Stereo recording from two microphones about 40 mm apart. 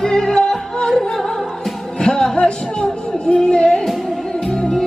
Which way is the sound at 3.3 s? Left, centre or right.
Left.